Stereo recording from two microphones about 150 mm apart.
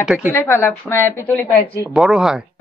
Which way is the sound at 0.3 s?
20° left (ahead or behind).